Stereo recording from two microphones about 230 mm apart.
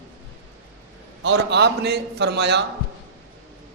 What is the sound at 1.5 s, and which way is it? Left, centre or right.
Speech, right.